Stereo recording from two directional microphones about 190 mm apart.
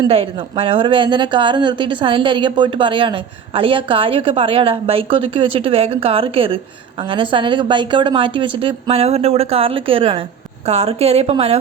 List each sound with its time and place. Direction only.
0.0 s a woman's voice: 30° right (ahead or behind)